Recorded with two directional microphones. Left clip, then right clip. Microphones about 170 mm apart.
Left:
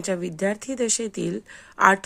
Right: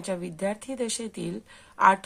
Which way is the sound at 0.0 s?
25° left (ahead or behind).